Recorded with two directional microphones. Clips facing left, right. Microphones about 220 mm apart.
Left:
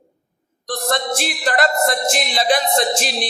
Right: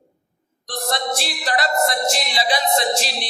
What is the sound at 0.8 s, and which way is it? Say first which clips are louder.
Music: left 3 dB; 50° left (ahead or behind).